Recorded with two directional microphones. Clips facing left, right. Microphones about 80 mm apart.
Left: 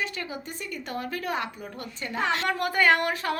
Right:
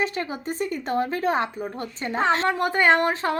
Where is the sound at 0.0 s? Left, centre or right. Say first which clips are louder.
Right 6 dB; right.